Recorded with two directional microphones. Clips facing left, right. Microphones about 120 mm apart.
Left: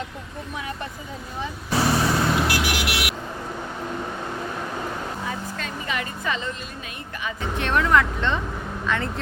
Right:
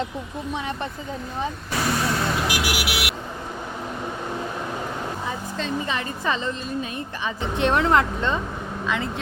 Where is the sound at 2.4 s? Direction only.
10° right (ahead or behind).